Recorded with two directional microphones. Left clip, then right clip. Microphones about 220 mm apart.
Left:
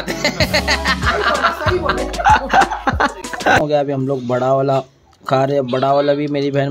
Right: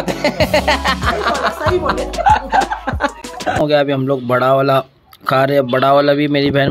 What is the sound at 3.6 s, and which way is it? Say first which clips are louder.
Speech: right 3 dB; 5° left (ahead or behind).